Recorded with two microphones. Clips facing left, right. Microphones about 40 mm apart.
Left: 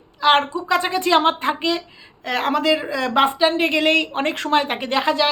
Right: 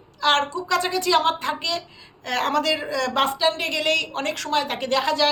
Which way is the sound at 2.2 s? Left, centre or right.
Centre.